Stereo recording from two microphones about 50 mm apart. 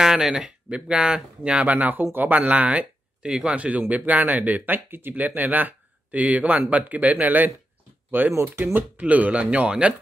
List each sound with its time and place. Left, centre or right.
0.0 s speech: centre
3.5 s speech: right